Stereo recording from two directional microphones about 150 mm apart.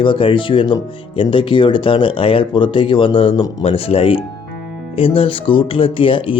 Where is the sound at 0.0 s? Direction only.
35° left (ahead or behind).